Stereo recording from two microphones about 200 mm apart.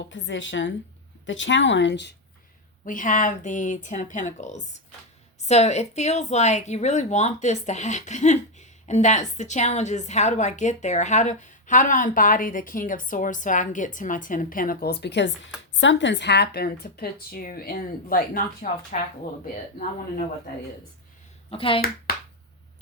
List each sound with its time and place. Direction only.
0.1 s speech: 65° left (ahead or behind)
2.8 s speech: 40° left (ahead or behind)
21.5 s speech: 25° left (ahead or behind)